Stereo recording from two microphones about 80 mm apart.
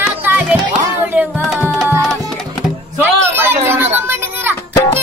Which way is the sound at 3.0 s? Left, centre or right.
Right.